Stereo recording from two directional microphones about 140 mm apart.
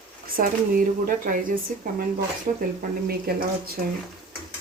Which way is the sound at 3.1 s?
90° right.